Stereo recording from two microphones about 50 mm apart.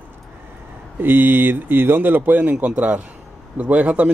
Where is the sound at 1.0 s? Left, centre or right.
Right.